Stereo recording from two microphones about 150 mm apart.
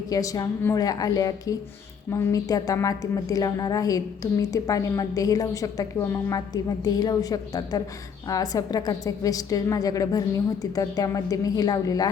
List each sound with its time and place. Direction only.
0.1 s a woman's voice: 25° left (ahead or behind)